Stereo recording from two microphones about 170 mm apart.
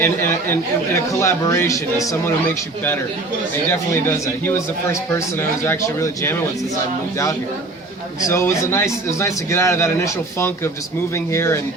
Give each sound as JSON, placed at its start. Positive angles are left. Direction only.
{"t": 0.0, "sound": "speech", "side_deg": 15}
{"t": 3.7, "sound": "speech", "side_deg": 15}
{"t": 8.2, "sound": "speech", "side_deg": 15}